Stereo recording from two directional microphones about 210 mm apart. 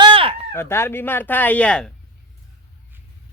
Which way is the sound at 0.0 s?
25° right (ahead or behind).